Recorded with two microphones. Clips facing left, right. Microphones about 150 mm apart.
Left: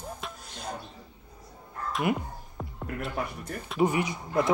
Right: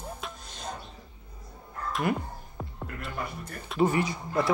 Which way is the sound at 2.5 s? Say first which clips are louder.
Left 4 dB; centre (ahead or behind).